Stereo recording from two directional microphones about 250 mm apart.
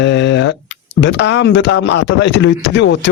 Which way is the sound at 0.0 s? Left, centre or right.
Left.